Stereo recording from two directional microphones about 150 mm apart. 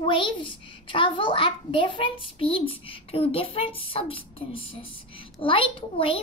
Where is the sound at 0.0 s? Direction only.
35° left (ahead or behind).